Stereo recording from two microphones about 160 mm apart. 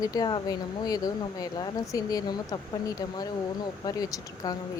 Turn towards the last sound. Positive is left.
turn(degrees=20)  # may be behind; listen again after turning